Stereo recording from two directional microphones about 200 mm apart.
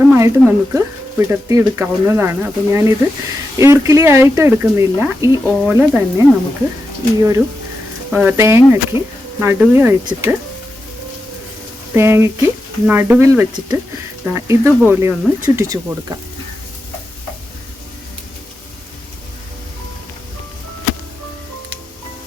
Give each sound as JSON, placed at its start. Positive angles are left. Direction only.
{"t": 0.0, "sound": "speech", "side_deg": -10}
{"t": 11.9, "sound": "speech", "side_deg": -10}